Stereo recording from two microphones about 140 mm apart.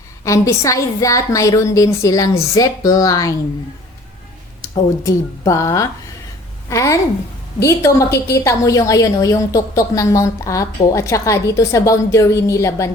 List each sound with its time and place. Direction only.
0.3 s a woman's voice: 20° left (ahead or behind)
5.0 s a woman's voice: 25° left (ahead or behind)